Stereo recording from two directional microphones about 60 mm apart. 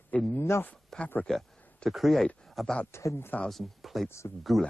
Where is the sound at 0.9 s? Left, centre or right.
Centre.